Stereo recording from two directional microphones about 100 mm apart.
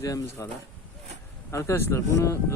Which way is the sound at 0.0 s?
35° left (ahead or behind).